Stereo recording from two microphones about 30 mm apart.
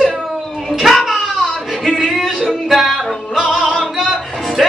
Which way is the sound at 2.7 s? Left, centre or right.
Centre.